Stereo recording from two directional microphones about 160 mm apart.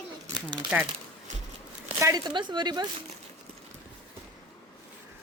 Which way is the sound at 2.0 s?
25° right (ahead or behind).